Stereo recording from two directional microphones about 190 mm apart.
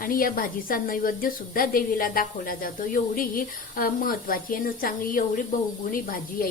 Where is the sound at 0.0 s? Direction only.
50° left (ahead or behind).